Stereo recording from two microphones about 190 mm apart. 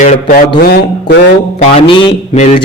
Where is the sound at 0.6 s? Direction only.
55° left (ahead or behind).